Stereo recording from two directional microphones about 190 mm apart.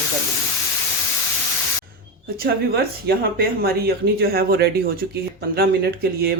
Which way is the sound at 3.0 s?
55° right (ahead or behind).